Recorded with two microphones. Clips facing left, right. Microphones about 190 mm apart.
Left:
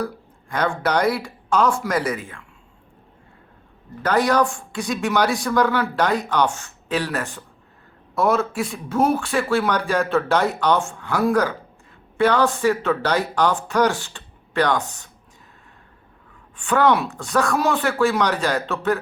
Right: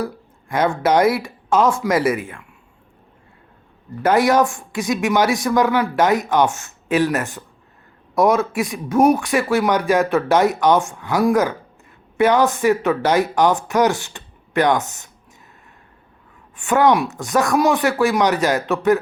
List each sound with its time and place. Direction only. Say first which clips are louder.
0.6 s speech: right 4 dB; 20° right (ahead or behind)
2.0 s a man's voice: right 6 dB; 10° right (ahead or behind)
4.4 s a man's voice: right 3 dB; 20° right (ahead or behind)
16.6 s speech: right 3 dB; 15° right (ahead or behind)